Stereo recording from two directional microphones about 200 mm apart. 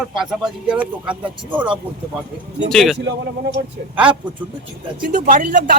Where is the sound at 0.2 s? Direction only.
5° right (ahead or behind).